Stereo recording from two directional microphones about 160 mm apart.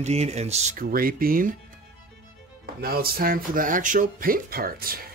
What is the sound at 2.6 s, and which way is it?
Speech, 70° right (ahead or behind).